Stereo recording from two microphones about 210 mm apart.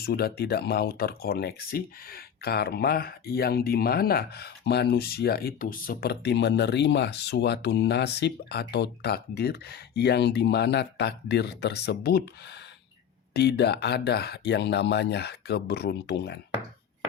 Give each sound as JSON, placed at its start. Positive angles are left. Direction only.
{"t": 0.0, "sound": "speech", "side_deg": 50}